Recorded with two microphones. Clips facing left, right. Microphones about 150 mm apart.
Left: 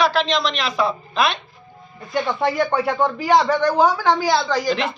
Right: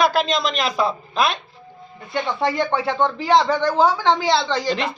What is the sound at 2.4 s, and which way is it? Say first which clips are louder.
Speech: left 1 dB; 20° right (ahead or behind).